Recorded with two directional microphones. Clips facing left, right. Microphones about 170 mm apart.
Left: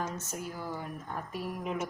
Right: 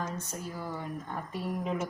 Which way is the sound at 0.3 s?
5° left (ahead or behind).